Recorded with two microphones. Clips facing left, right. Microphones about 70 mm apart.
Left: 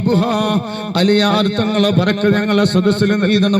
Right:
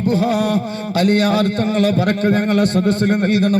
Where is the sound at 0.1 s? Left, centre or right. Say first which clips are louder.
Left 1 dB; left.